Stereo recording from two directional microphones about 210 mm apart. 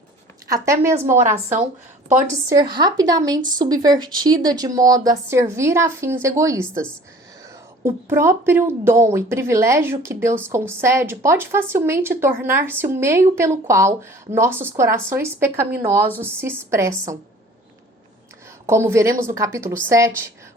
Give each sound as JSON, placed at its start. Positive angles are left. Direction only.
{"t": 0.4, "sound": "a woman's voice", "side_deg": -15}
{"t": 0.9, "sound": "a woman's voice", "side_deg": -35}
{"t": 2.0, "sound": "a woman's voice", "side_deg": -10}
{"t": 7.9, "sound": "a woman's voice", "side_deg": -10}
{"t": 15.7, "sound": "speech", "side_deg": -45}
{"t": 16.0, "sound": "a woman's voice", "side_deg": -10}
{"t": 18.6, "sound": "a woman's voice", "side_deg": -10}